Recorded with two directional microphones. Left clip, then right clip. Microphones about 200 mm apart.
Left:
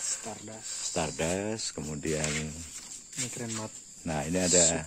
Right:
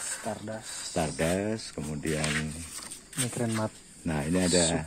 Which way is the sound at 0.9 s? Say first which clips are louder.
Right 3 dB; 15° left (ahead or behind).